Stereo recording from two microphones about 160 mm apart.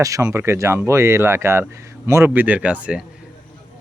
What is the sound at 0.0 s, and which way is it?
Speech, 20° right (ahead or behind).